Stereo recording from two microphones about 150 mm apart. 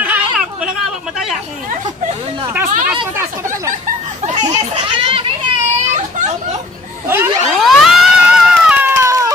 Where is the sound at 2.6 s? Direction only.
65° right (ahead or behind).